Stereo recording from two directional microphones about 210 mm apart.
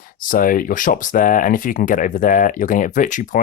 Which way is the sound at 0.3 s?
40° left (ahead or behind).